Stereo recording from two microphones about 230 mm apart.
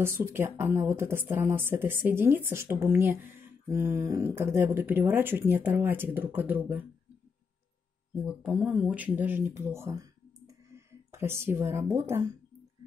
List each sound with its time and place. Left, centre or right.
0.0 s a woman's voice: centre
8.3 s speech: centre